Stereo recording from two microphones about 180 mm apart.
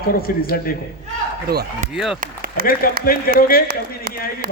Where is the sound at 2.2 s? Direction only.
55° right (ahead or behind).